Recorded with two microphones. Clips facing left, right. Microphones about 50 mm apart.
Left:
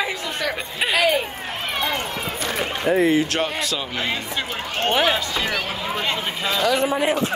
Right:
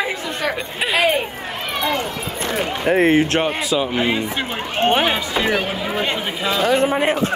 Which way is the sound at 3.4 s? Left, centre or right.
Centre.